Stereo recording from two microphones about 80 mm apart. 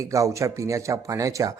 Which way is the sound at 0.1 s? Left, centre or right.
Right.